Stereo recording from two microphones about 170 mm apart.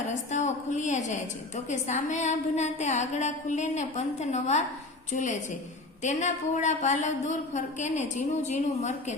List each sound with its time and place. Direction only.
0.1 s a woman's voice: 45° left (ahead or behind)